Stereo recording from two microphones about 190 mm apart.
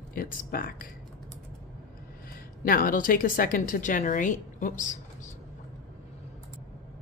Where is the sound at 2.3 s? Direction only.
50° left (ahead or behind).